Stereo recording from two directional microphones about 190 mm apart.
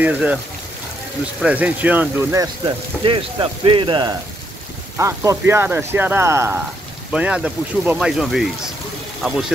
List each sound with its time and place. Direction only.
0.0 s speech: 5° right (ahead or behind)
1.4 s speech: 10° right (ahead or behind)